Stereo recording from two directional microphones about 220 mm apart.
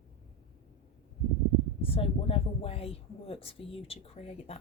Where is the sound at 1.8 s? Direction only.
25° left (ahead or behind).